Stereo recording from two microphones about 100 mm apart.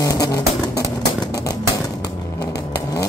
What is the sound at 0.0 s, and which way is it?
Vehicle, 35° left (ahead or behind).